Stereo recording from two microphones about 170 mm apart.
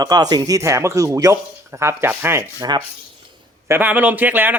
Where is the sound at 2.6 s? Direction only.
25° right (ahead or behind).